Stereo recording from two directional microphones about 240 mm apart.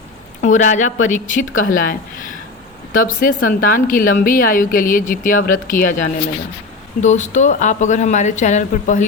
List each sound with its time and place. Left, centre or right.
0.4 s speech: left